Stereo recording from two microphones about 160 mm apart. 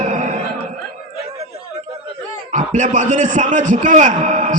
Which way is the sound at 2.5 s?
50° right (ahead or behind).